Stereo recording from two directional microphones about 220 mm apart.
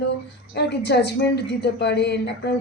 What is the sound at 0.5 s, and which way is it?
A woman's voice, 50° left (ahead or behind).